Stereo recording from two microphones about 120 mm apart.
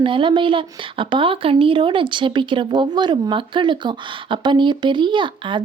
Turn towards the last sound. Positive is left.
turn(degrees=-40)  # may be behind; listen again after turning